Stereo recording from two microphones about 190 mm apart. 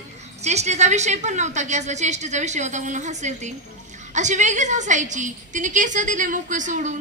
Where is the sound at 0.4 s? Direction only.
35° right (ahead or behind).